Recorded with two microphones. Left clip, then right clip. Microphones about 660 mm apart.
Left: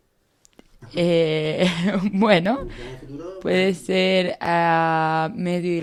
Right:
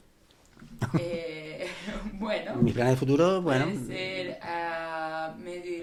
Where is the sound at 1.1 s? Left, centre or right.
Left.